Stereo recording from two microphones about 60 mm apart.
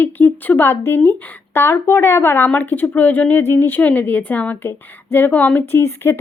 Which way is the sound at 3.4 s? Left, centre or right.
Left.